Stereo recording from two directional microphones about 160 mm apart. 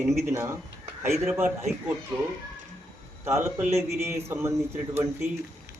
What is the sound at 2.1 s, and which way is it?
Speech, 25° right (ahead or behind).